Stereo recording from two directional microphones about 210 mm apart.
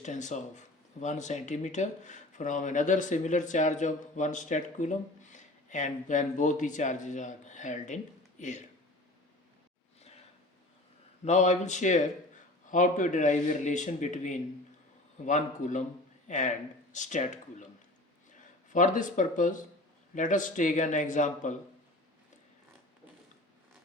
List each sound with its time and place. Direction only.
0.0 s speech: 35° left (ahead or behind)
11.3 s speech: 35° left (ahead or behind)